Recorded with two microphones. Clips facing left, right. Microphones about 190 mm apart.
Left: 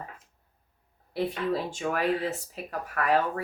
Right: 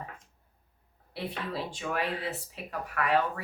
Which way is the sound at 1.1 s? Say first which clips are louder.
Left 7 dB; 45° left (ahead or behind).